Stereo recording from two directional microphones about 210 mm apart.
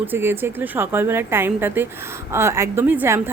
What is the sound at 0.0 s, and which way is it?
Speech, 10° right (ahead or behind).